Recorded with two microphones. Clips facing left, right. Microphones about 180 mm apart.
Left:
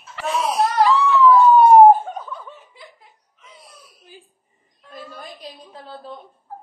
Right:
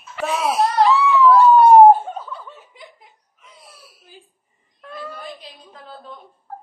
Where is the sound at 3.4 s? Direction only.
Centre (ahead or behind).